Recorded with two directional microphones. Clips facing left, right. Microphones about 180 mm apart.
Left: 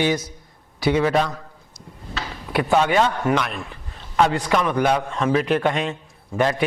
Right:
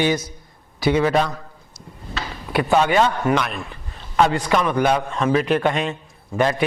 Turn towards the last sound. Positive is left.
turn(degrees=-20)  # may be behind; listen again after turning